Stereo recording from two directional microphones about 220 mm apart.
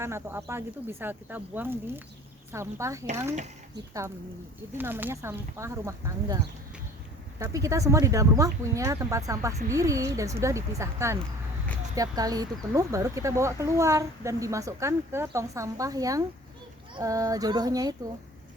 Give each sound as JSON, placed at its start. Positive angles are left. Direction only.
{"t": 0.0, "sound": "speech", "side_deg": -10}
{"t": 4.8, "sound": "speech", "side_deg": -10}